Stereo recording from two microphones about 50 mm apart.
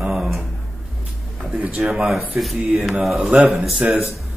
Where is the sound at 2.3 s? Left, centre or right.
Centre.